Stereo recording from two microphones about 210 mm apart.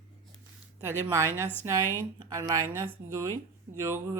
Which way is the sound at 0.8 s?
10° right (ahead or behind).